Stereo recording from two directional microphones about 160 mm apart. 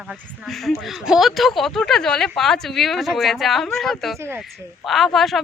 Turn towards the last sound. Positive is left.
turn(degrees=0)  # may be behind; listen again after turning